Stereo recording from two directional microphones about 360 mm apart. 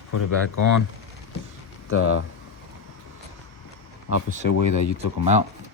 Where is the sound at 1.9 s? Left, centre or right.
Left.